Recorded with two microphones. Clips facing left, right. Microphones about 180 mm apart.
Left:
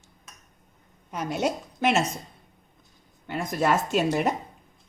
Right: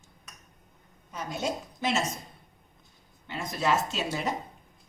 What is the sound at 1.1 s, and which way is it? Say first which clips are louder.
Speech: left 5 dB; 65° left (ahead or behind).